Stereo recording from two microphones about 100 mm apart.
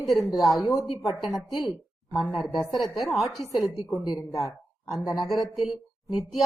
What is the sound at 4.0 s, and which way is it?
Speech, 45° left (ahead or behind).